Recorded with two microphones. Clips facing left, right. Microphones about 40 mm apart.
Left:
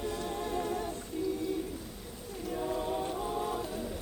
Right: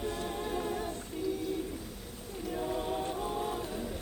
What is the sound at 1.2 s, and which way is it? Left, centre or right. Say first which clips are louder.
Bird: left 1 dB; right.